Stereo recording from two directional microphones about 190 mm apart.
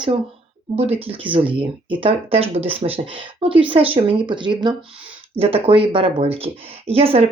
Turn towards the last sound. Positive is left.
turn(degrees=-30)  # may be behind; listen again after turning